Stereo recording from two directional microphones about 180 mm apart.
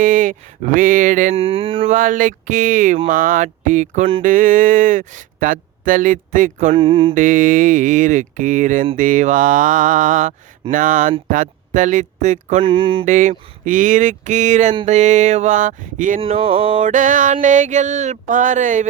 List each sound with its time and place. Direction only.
0.0 s speech: 45° right (ahead or behind)
1.4 s mantra: 30° right (ahead or behind)
1.9 s speech: 45° right (ahead or behind)
6.7 s mantra: 30° right (ahead or behind)
7.1 s speech: 45° right (ahead or behind)
12.6 s mantra: 30° right (ahead or behind)
13.1 s speech: 45° right (ahead or behind)
16.5 s mantra: 30° right (ahead or behind)
16.8 s speech: 45° right (ahead or behind)